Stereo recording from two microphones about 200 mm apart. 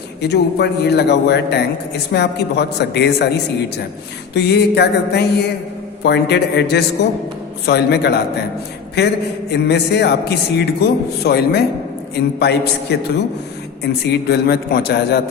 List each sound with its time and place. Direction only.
0.2 s a man's voice: 55° left (ahead or behind)